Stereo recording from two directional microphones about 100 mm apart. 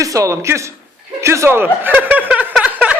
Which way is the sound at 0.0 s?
30° right (ahead or behind).